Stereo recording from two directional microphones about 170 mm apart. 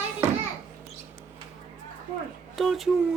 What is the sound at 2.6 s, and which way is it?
Speech, centre (ahead or behind).